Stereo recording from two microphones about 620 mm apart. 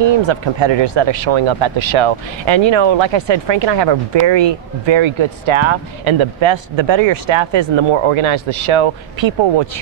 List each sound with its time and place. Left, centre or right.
0.0 s speech: right